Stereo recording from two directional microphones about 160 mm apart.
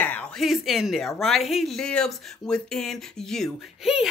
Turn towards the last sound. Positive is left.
turn(degrees=0)  # may be behind; listen again after turning